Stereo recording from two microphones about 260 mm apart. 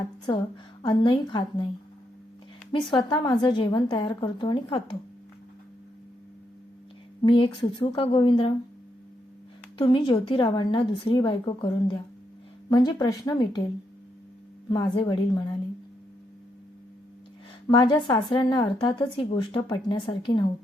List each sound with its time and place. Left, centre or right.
0.8 s a woman's voice: centre
2.7 s a woman's voice: centre
7.2 s a woman's voice: centre
9.7 s a woman's voice: centre
14.7 s a woman's voice: centre
17.7 s a woman's voice: centre